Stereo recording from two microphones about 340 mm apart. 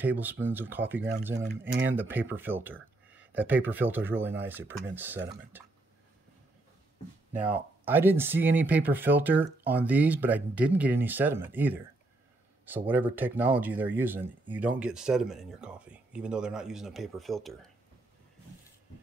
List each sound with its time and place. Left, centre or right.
0.0 s speech: centre
7.3 s speech: centre